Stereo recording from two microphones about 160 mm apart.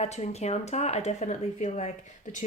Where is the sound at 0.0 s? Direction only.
40° left (ahead or behind).